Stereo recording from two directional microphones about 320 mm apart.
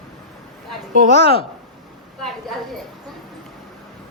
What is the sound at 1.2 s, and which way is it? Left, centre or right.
Speech, centre.